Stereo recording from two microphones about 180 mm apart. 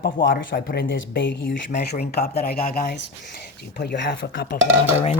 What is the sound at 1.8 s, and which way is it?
Speech, 65° left (ahead or behind).